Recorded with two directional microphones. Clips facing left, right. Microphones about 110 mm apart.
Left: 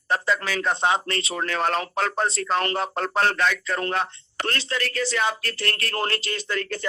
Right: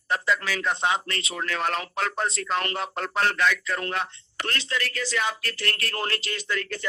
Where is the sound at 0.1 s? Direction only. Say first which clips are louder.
Left 2 dB; 35° left (ahead or behind).